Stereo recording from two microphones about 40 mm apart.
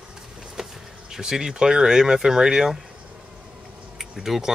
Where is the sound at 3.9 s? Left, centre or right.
Centre.